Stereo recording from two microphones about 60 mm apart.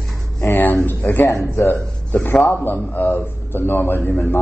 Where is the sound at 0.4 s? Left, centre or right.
Left.